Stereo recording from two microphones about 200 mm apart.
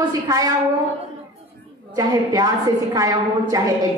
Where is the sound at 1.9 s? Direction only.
20° right (ahead or behind).